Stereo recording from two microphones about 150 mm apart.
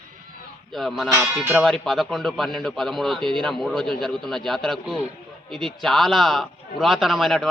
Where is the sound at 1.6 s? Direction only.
5° left (ahead or behind).